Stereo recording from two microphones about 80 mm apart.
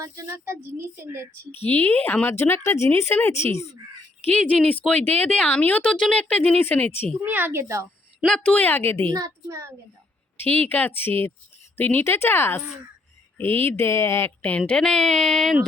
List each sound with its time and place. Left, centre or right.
0.0 s a woman's voice: right
1.5 s speech: left
4.3 s speech: centre
7.3 s a woman's voice: right
8.3 s speech: centre
9.1 s a woman's voice: right
10.4 s speech: left
14.8 s speech: centre